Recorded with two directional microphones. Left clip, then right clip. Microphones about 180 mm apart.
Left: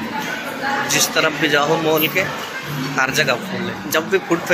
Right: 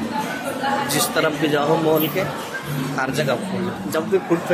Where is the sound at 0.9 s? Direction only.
20° right (ahead or behind).